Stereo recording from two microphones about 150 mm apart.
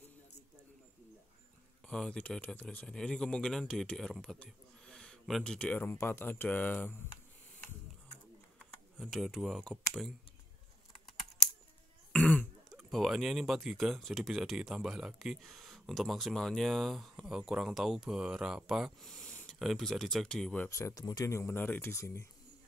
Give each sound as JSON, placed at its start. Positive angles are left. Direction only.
{"t": 1.9, "sound": "speech", "side_deg": 5}
{"t": 8.5, "sound": "speech", "side_deg": 0}
{"t": 12.1, "sound": "throat clearing", "side_deg": 10}
{"t": 12.9, "sound": "speech", "side_deg": 0}
{"t": 20.7, "sound": "speech", "side_deg": 20}